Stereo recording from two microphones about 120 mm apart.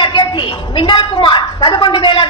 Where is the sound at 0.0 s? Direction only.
35° left (ahead or behind).